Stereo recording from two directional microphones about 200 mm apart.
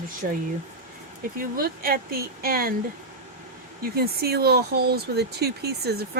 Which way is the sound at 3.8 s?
50° right (ahead or behind).